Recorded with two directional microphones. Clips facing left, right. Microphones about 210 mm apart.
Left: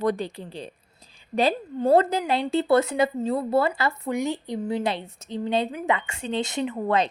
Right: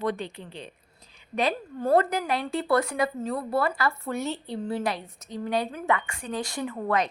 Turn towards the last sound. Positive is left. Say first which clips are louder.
# left 3 dB
turn(degrees=25)  # may be behind; listen again after turning